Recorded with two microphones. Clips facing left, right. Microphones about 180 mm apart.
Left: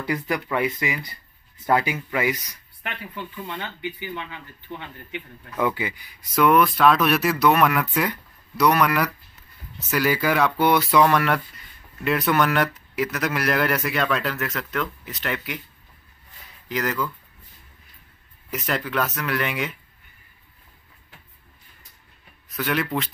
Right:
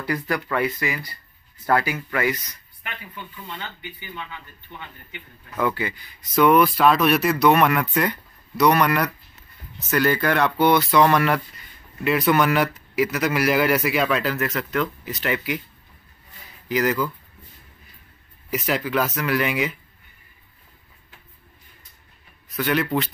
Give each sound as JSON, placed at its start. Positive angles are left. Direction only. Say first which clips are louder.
{"t": 0.0, "sound": "speech", "louder": "even", "side_deg": 20}
{"t": 4.1, "sound": "speech", "louder": "left 3 dB", "side_deg": 75}
{"t": 5.6, "sound": "speech", "louder": "even", "side_deg": 15}
{"t": 6.3, "sound": "speech", "louder": "right 2 dB", "side_deg": 0}
{"t": 16.6, "sound": "speech", "louder": "right 4 dB", "side_deg": -5}
{"t": 18.5, "sound": "speech", "louder": "right 3 dB", "side_deg": -5}
{"t": 22.5, "sound": "speech", "louder": "right 3 dB", "side_deg": 0}